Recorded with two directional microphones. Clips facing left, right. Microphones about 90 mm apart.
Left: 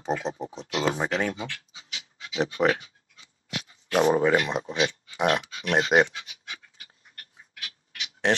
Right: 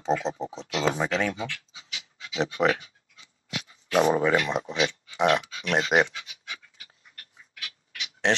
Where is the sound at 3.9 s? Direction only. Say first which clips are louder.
Left 1 dB; 30° left (ahead or behind).